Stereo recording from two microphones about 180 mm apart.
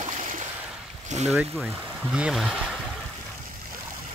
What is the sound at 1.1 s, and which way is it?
Speech, 40° right (ahead or behind).